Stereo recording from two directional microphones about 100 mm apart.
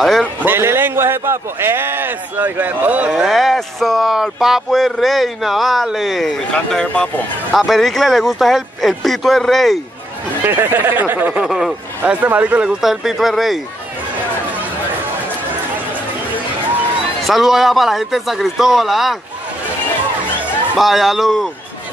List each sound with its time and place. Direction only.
0.0 s a man's voice: 5° left (ahead or behind)
0.5 s a man's voice: 25° right (ahead or behind)
3.3 s speech: centre (ahead or behind)
10.4 s speech: 20° right (ahead or behind)
11.4 s speech: 5° right (ahead or behind)
12.0 s speech: 15° right (ahead or behind); by 13.6 s centre (ahead or behind)
17.2 s speech: centre (ahead or behind)
20.7 s speech: centre (ahead or behind)